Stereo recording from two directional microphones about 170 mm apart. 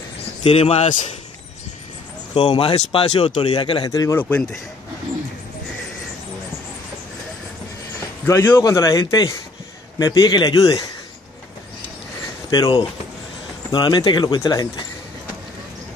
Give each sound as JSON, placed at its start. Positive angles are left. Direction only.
{"t": 0.4, "sound": "speech", "side_deg": 35}
{"t": 2.3, "sound": "speech", "side_deg": 30}
{"t": 4.2, "sound": "speech", "side_deg": 5}
{"t": 8.3, "sound": "speech", "side_deg": 15}
{"t": 12.4, "sound": "speech", "side_deg": 25}